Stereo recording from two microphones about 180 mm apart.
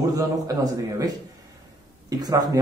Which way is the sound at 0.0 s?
20° right (ahead or behind).